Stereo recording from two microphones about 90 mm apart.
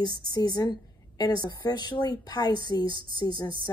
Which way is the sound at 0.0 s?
50° left (ahead or behind).